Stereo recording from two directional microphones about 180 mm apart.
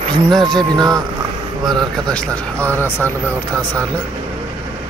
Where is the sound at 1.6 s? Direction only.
Centre (ahead or behind).